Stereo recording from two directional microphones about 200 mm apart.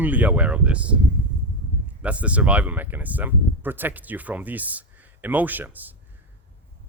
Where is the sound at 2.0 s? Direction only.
5° right (ahead or behind).